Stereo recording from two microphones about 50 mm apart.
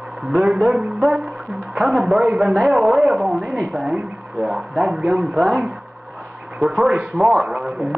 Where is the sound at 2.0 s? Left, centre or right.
Right.